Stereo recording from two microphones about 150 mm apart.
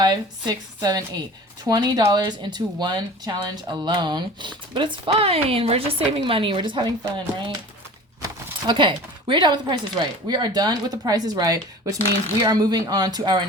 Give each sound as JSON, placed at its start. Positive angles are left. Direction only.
{"t": 0.0, "sound": "speech", "side_deg": -25}